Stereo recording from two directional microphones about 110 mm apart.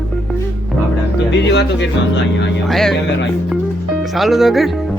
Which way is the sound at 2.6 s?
Centre (ahead or behind).